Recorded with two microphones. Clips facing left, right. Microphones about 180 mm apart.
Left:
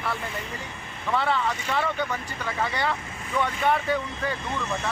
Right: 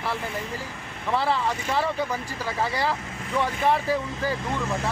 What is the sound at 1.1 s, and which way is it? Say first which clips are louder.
Speech: right 1 dB; 30° right (ahead or behind).